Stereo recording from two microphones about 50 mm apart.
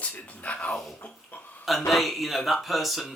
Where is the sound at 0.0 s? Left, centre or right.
Left.